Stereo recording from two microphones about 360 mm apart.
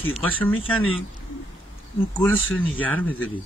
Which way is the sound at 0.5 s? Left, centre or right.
Left.